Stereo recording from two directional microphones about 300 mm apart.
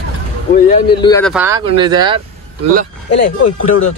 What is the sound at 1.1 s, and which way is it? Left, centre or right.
Speech, centre.